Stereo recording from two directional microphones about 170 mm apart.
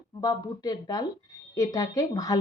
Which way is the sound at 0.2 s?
20° left (ahead or behind).